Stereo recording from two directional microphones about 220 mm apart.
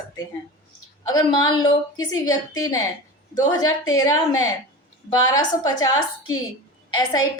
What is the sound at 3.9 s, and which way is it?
A woman's voice, 15° left (ahead or behind).